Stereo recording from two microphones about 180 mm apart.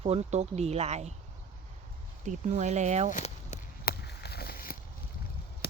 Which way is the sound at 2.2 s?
40° right (ahead or behind).